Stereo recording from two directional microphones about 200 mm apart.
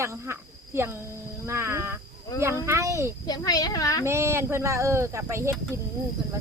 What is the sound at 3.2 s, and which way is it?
Speech, 20° left (ahead or behind).